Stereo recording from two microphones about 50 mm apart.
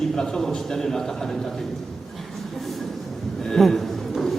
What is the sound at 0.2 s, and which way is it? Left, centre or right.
A man's voice, centre.